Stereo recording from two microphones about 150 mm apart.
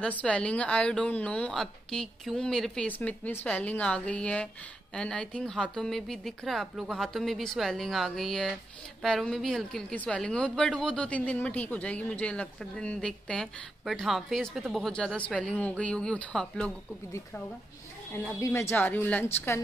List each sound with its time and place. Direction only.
0.0 s a woman's voice: 10° left (ahead or behind)
18.4 s a woman's voice: 15° left (ahead or behind)